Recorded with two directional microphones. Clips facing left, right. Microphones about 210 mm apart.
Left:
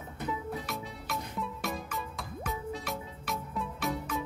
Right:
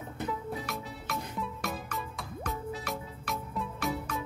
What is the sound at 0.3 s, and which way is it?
Music, centre (ahead or behind).